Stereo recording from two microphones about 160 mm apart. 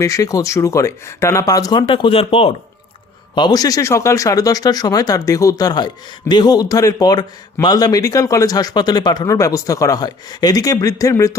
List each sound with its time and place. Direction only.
0.0 s speech: 20° left (ahead or behind); by 2.6 s 35° left (ahead or behind)
3.3 s speech: 25° left (ahead or behind)